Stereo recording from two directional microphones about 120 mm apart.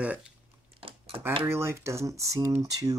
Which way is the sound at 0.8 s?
50° right (ahead or behind).